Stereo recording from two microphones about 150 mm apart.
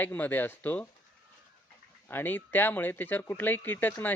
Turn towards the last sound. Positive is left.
turn(degrees=15)  # may be behind; listen again after turning